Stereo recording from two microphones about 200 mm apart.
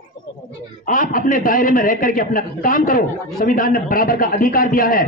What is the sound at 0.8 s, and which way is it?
A man's voice, 45° left (ahead or behind).